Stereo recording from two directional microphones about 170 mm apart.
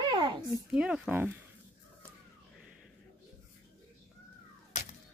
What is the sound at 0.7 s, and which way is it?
Speech, 5° right (ahead or behind).